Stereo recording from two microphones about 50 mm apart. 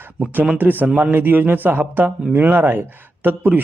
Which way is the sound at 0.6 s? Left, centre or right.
Right.